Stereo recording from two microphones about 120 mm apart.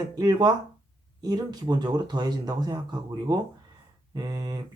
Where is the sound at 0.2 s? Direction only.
35° right (ahead or behind).